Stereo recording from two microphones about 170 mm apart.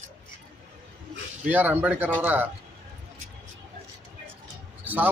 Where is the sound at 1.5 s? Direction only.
10° right (ahead or behind).